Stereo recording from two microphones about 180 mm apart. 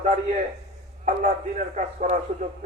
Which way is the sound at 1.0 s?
45° right (ahead or behind).